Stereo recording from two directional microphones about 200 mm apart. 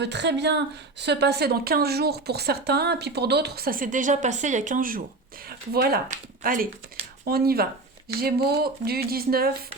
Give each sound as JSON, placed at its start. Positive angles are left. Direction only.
{"t": 0.0, "sound": "a woman's voice", "side_deg": -60}